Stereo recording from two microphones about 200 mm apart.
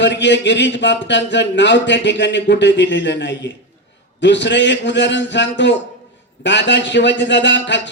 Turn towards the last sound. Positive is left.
turn(degrees=65)  # may be behind; listen again after turning